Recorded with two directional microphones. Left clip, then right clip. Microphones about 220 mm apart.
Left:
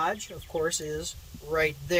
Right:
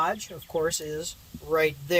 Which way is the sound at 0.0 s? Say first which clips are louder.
Right 2 dB; 15° right (ahead or behind).